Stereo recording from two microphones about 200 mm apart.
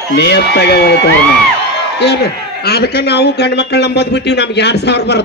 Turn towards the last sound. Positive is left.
turn(degrees=55)  # may be behind; listen again after turning